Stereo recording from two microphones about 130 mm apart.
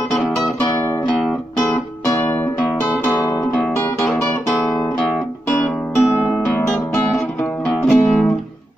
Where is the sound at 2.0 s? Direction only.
15° left (ahead or behind).